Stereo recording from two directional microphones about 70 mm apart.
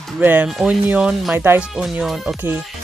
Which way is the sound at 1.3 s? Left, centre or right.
Right.